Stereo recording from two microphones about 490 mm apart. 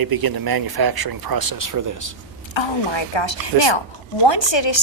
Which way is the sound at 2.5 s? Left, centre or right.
Left.